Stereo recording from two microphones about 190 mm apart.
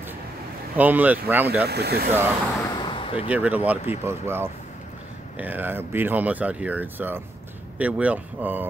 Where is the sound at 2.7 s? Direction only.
25° left (ahead or behind).